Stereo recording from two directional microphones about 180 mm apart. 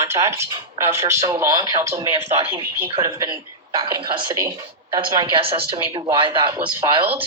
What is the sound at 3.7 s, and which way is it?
Speech, 25° right (ahead or behind).